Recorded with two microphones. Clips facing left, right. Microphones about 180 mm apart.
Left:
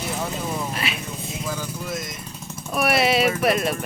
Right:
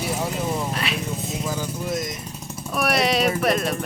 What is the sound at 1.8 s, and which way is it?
Speech, 40° right (ahead or behind).